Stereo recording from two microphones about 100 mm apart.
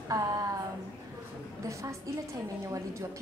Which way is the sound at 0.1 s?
35° right (ahead or behind).